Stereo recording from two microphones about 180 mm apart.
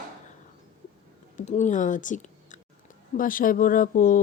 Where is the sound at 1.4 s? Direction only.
40° left (ahead or behind).